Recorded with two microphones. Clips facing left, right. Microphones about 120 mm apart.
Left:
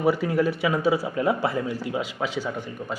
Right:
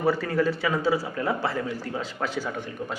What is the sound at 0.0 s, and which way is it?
Speech, 10° left (ahead or behind).